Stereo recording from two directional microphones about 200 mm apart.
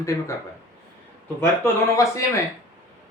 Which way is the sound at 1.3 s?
10° left (ahead or behind).